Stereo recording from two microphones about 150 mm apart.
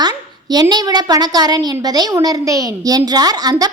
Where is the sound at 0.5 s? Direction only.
25° right (ahead or behind).